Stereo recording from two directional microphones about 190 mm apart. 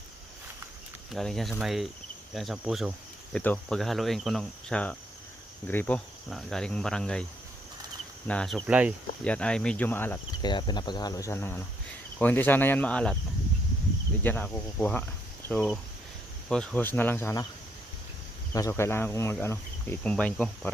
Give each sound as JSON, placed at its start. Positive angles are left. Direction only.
{"t": 1.1, "sound": "cricket", "side_deg": 0}
{"t": 8.3, "sound": "cricket", "side_deg": 5}
{"t": 8.6, "sound": "speech", "side_deg": -5}
{"t": 9.2, "sound": "speech", "side_deg": 5}
{"t": 10.4, "sound": "speech", "side_deg": 25}
{"t": 14.3, "sound": "speech", "side_deg": 10}
{"t": 18.5, "sound": "speech", "side_deg": 15}